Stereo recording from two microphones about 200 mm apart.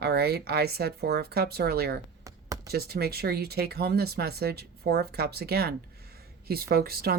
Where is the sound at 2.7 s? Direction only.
50° right (ahead or behind).